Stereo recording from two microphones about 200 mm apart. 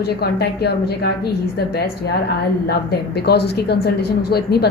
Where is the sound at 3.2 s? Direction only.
55° left (ahead or behind).